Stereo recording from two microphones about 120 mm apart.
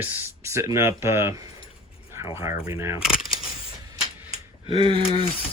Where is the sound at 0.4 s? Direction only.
25° right (ahead or behind).